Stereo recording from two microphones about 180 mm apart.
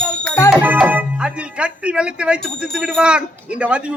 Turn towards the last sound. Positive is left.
turn(degrees=-5)  # may be behind; listen again after turning